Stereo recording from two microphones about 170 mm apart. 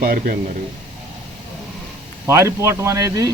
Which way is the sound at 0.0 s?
55° right (ahead or behind).